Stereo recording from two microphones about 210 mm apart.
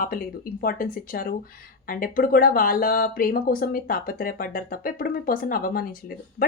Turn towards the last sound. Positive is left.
turn(degrees=45)  # may be behind; listen again after turning